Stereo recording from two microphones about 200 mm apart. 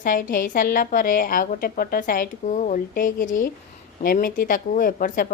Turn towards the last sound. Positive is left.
turn(degrees=45)  # may be behind; listen again after turning